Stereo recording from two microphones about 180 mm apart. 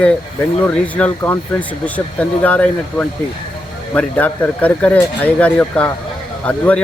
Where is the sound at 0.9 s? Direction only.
10° left (ahead or behind).